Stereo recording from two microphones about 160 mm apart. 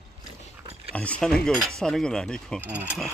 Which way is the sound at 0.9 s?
10° left (ahead or behind).